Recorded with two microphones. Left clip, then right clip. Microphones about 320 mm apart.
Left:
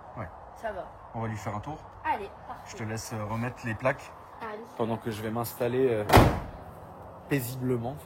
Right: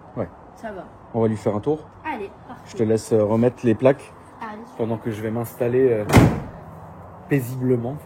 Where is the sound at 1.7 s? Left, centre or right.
Left.